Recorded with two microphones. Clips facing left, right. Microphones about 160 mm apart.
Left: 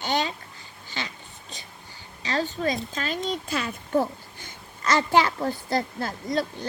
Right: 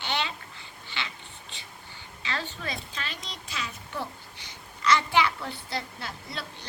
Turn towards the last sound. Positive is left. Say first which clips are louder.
# left 11 dB
turn(degrees=45)  # may be behind; listen again after turning